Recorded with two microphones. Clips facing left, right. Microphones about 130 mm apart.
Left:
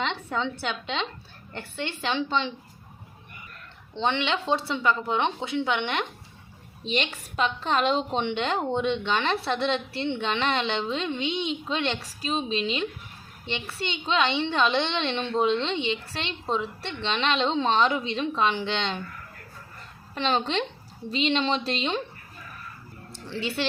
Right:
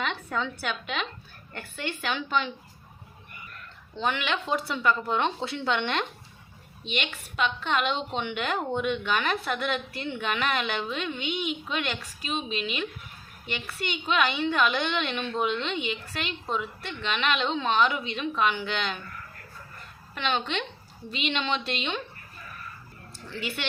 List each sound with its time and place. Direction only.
0.0 s a woman's voice: 25° left (ahead or behind)
3.9 s a woman's voice: 25° left (ahead or behind)
6.8 s a woman's voice: 35° left (ahead or behind)
20.1 s a woman's voice: 35° left (ahead or behind)
23.2 s a woman's voice: 30° left (ahead or behind)